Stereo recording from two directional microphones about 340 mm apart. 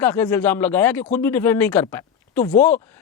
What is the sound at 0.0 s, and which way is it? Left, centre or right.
Speech, centre.